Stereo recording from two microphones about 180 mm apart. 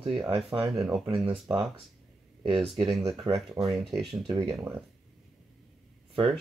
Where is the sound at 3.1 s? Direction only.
Centre (ahead or behind).